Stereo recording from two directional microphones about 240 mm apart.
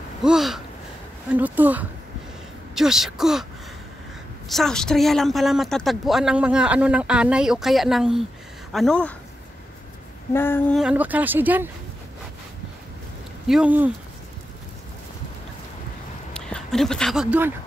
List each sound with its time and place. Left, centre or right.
0.2 s a woman's voice: centre
4.5 s a woman's voice: centre
10.3 s female singing: centre
10.8 s speech: centre
13.5 s a woman's voice: centre
16.3 s speech: centre